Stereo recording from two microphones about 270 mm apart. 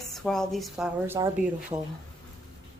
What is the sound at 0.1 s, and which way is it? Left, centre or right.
Speech, centre.